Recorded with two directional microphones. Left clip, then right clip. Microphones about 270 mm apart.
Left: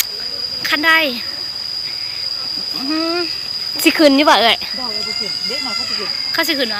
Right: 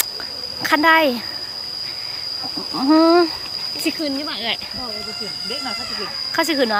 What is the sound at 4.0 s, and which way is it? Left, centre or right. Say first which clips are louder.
Speech: left 14 dB; left.